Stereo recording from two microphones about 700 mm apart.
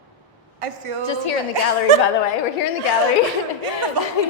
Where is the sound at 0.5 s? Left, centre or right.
Right.